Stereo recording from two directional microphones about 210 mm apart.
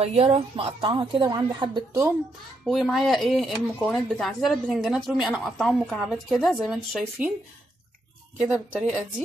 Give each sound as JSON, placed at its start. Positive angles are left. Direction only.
{"t": 0.0, "sound": "a woman's voice", "side_deg": -30}
{"t": 2.6, "sound": "speech", "side_deg": 0}
{"t": 8.4, "sound": "speech", "side_deg": -5}